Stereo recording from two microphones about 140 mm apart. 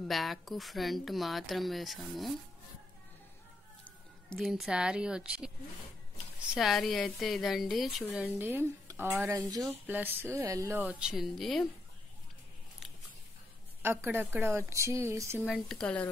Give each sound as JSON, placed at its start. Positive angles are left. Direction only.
{"t": 0.1, "sound": "a woman's voice", "side_deg": 0}
{"t": 4.4, "sound": "a woman's voice", "side_deg": 0}
{"t": 6.5, "sound": "a woman's voice", "side_deg": 0}
{"t": 8.1, "sound": "speech", "side_deg": -10}
{"t": 9.8, "sound": "speech", "side_deg": -15}
{"t": 10.8, "sound": "a woman's voice", "side_deg": -10}
{"t": 13.8, "sound": "speech", "side_deg": -15}
{"t": 15.4, "sound": "a woman's voice", "side_deg": 0}